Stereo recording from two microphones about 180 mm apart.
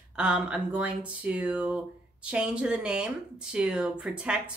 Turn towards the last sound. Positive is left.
turn(degrees=-5)  # may be behind; listen again after turning